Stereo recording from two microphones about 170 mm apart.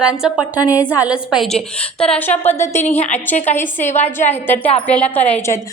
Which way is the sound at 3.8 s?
45° left (ahead or behind).